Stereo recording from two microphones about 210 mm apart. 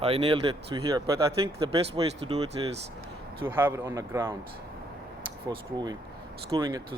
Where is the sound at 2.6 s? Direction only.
25° right (ahead or behind).